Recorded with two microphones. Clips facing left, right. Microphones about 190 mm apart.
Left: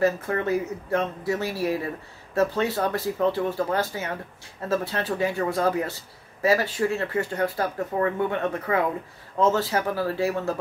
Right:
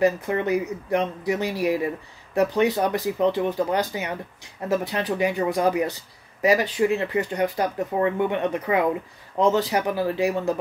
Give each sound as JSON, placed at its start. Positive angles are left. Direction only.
{"t": 0.0, "sound": "speech", "side_deg": -15}